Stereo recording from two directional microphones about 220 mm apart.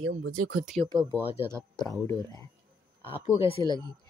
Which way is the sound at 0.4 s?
80° right.